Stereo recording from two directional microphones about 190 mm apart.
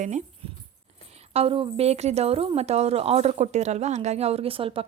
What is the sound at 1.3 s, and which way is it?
A woman's voice, 30° right (ahead or behind).